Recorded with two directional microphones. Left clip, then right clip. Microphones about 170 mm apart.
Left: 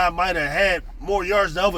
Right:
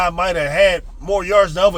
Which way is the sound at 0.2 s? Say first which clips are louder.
Right 5 dB; 20° right (ahead or behind).